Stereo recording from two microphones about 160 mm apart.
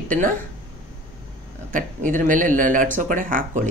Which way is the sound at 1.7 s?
55° right (ahead or behind).